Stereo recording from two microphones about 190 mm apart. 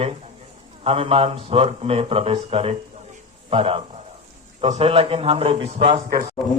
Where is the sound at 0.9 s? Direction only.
30° right (ahead or behind).